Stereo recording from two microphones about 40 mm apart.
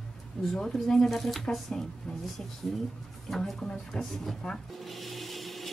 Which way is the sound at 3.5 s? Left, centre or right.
Centre.